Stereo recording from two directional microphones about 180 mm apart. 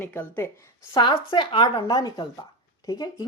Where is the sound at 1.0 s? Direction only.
25° left (ahead or behind).